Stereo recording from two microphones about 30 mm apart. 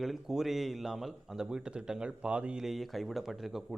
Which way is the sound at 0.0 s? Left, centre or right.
Centre.